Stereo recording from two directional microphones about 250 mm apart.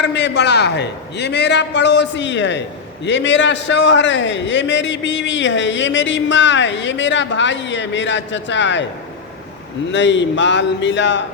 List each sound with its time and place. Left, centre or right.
0.0 s a man's voice: left
9.9 s a man's voice: left